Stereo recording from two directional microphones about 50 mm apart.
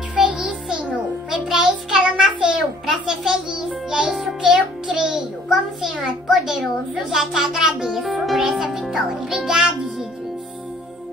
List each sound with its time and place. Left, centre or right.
0.1 s music: centre
1.3 s a sound: centre
4.1 s music: centre
4.5 s music: centre
5.5 s a sound: centre
7.1 s a child's voice: centre
9.5 s a child's voice: centre